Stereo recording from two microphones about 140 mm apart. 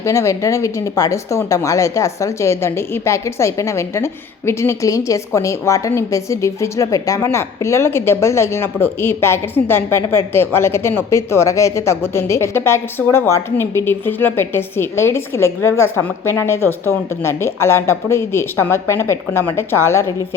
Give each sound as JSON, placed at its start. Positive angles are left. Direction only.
{"t": 0.0, "sound": "speech", "side_deg": 20}